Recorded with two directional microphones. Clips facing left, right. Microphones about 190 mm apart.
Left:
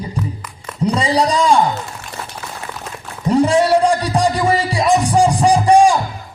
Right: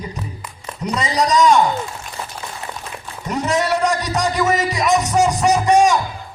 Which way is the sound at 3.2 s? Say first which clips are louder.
Left 7 dB; 30° left (ahead or behind).